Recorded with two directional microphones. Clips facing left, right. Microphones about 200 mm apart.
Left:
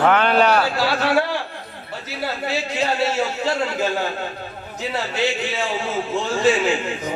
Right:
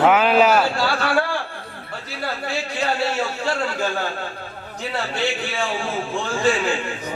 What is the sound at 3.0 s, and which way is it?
A man's voice, 20° left (ahead or behind).